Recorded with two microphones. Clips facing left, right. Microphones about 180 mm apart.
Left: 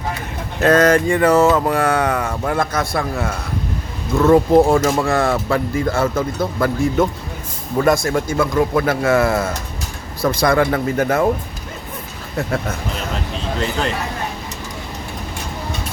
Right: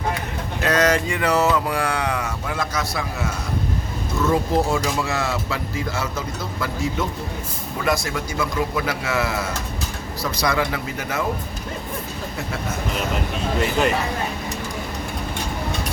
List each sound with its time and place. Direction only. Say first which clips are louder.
0.6 s speech: left 7 dB; 50° left (ahead or behind)